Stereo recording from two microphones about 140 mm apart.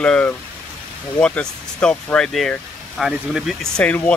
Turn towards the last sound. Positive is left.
turn(degrees=10)  # may be behind; listen again after turning